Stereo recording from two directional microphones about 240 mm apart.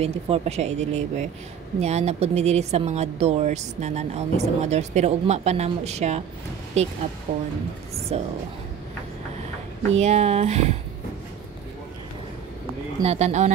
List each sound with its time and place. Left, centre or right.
0.0 s speech: right
8.1 s speech: right
9.8 s speech: right
13.0 s speech: right